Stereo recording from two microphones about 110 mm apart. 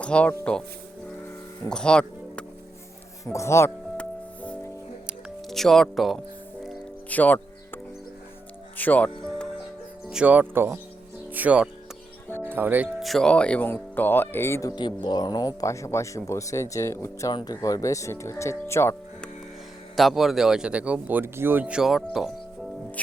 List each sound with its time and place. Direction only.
0.0 s speech: 10° left (ahead or behind)
1.7 s speech: 10° left (ahead or behind)
3.3 s speech: 25° left (ahead or behind)
5.5 s speech: centre (ahead or behind)
7.1 s speech: 15° left (ahead or behind)
8.8 s speech: 15° left (ahead or behind)
10.1 s speech: 10° right (ahead or behind)
13.0 s speech: centre (ahead or behind); by 14.7 s 25° left (ahead or behind)
14.8 s speech: 40° left (ahead or behind); by 18.9 s 25° left (ahead or behind)
20.0 s speech: centre (ahead or behind)